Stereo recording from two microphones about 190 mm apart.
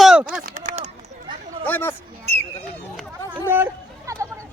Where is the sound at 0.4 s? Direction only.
45° right (ahead or behind).